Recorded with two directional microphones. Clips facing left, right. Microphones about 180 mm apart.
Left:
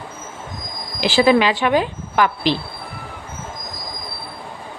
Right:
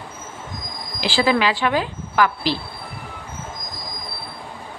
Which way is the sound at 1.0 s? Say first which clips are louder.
Left 5 dB; 20° left (ahead or behind).